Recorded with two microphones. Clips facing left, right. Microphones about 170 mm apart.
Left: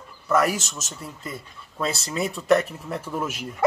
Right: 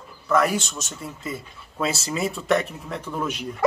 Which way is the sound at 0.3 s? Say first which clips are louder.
Right 1 dB; 5° left (ahead or behind).